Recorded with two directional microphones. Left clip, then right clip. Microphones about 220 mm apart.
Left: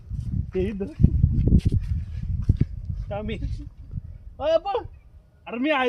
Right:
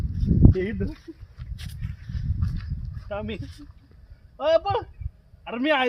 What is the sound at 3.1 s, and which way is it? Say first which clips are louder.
A man's voice: even; 10° left (ahead or behind).